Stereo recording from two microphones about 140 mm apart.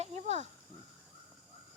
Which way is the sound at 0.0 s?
55° right (ahead or behind).